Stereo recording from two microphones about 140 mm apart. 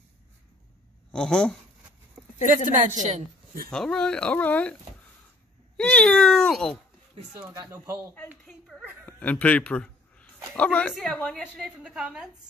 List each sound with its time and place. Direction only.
1.1 s speech: 5° left (ahead or behind)
2.4 s a woman's voice: 65° right (ahead or behind)
3.7 s a woman's voice: 5° left (ahead or behind)
5.8 s speech: 5° left (ahead or behind)
7.4 s speech: 20° right (ahead or behind)
8.5 s speech: centre (ahead or behind)
9.0 s a sound: 10° left (ahead or behind)
10.5 s a woman's voice: 10° left (ahead or behind)
11.8 s speech: 5° right (ahead or behind)